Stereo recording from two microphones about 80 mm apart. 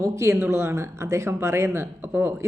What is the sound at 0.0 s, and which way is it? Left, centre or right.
Speech, right.